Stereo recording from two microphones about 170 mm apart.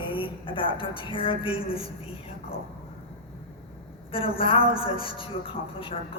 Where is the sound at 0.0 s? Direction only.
30° left (ahead or behind).